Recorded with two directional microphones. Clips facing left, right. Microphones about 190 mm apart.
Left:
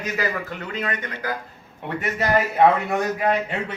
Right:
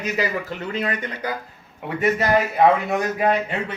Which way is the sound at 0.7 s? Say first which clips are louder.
Right 2 dB; 30° right (ahead or behind).